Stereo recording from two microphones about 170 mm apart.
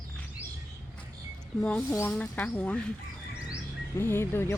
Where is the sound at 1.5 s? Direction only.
10° left (ahead or behind).